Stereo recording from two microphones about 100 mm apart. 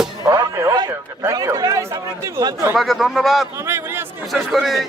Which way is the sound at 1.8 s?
30° right (ahead or behind).